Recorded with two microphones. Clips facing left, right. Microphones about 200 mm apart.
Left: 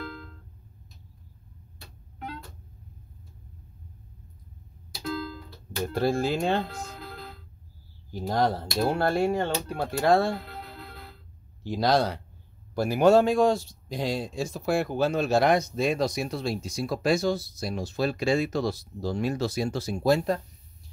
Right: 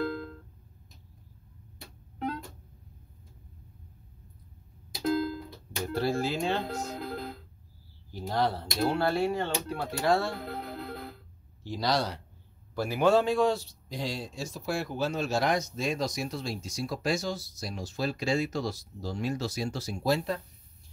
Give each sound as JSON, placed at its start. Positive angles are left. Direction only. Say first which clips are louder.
{"t": 5.0, "sound": "music", "louder": "right 5 dB", "side_deg": -50}
{"t": 5.9, "sound": "speech", "louder": "left 4 dB", "side_deg": 50}
{"t": 6.7, "sound": "music", "louder": "right 5 dB", "side_deg": -45}
{"t": 8.1, "sound": "speech", "louder": "left 3 dB", "side_deg": 45}
{"t": 10.4, "sound": "music", "louder": "right 5 dB", "side_deg": -50}
{"t": 11.6, "sound": "speech", "louder": "left 5 dB", "side_deg": 55}
{"t": 12.7, "sound": "speech", "louder": "left 5 dB", "side_deg": 45}